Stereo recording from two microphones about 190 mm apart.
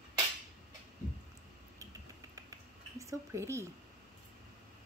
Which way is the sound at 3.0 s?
15° right (ahead or behind).